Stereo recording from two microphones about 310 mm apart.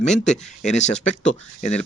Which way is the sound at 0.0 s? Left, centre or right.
Left.